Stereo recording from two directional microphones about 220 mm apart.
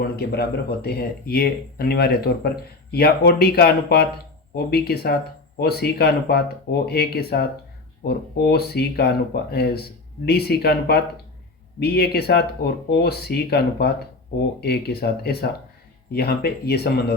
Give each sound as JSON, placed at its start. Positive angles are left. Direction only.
{"t": 0.0, "sound": "speech", "side_deg": 45}